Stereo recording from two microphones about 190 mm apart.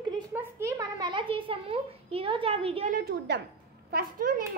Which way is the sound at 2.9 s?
55° right (ahead or behind).